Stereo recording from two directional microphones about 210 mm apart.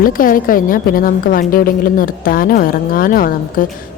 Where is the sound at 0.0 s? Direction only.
40° left (ahead or behind).